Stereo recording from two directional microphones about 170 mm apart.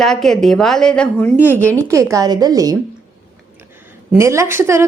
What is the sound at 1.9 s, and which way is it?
Speech, 20° right (ahead or behind).